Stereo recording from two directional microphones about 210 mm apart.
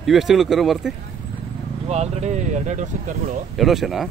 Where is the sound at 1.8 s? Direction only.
30° right (ahead or behind).